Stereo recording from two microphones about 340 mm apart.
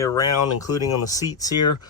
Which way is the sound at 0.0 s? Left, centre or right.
Centre.